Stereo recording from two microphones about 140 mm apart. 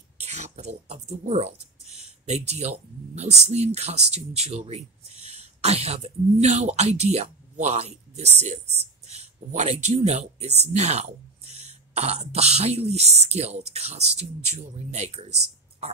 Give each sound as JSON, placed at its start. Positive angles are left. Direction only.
{"t": 0.2, "sound": "speech", "side_deg": -55}